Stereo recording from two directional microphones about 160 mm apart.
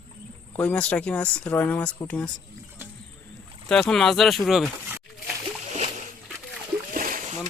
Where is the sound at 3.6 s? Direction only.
5° left (ahead or behind).